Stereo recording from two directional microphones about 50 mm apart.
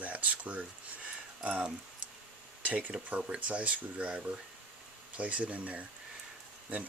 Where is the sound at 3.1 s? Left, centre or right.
Right.